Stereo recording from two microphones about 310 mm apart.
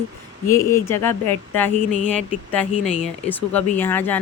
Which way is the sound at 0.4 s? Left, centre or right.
Centre.